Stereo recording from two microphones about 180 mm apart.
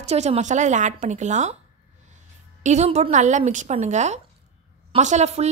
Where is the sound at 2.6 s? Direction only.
40° right (ahead or behind).